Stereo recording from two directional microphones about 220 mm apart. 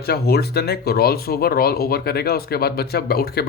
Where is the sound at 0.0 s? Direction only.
45° left (ahead or behind).